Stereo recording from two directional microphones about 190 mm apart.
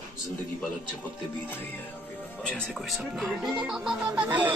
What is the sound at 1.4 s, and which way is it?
Speech, 10° left (ahead or behind).